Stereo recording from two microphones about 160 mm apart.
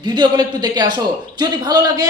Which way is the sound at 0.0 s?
30° right (ahead or behind).